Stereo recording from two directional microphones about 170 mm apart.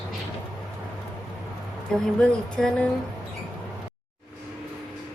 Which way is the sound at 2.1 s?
5° left (ahead or behind).